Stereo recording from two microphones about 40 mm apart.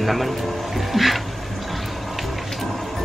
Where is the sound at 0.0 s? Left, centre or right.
Centre.